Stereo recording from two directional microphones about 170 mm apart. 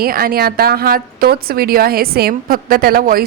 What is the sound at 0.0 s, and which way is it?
A woman's voice, 60° right (ahead or behind).